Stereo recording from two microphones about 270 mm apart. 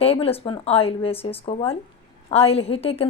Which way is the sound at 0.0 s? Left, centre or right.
Left.